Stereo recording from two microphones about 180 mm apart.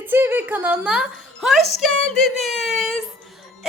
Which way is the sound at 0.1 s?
10° right (ahead or behind).